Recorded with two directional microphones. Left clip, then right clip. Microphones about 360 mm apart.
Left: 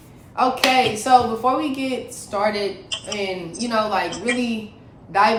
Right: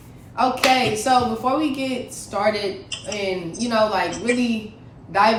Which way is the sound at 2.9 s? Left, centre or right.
Left.